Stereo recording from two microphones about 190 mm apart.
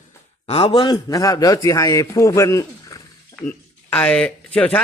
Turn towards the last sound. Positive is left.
turn(degrees=5)  # may be behind; listen again after turning